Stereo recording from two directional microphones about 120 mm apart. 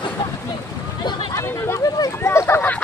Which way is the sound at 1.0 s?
35° left (ahead or behind).